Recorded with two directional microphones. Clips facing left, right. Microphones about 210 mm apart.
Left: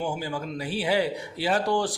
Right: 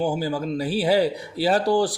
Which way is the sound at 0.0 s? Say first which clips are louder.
Right 6 dB; 35° right (ahead or behind).